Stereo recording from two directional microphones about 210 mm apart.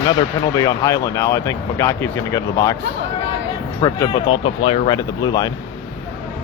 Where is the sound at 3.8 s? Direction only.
25° left (ahead or behind).